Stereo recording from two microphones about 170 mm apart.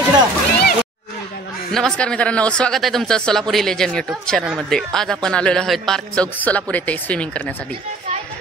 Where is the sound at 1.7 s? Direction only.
5° left (ahead or behind).